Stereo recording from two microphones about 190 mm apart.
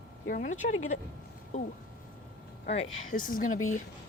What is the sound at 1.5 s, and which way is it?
Speech, 35° left (ahead or behind).